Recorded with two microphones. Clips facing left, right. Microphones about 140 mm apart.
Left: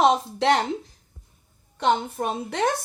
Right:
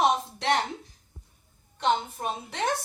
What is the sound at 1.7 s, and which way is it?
Speech, 60° left (ahead or behind).